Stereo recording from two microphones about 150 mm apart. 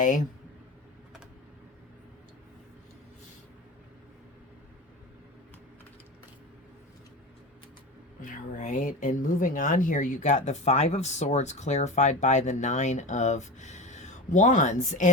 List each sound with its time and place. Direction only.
8.2 s speech: 60° left (ahead or behind)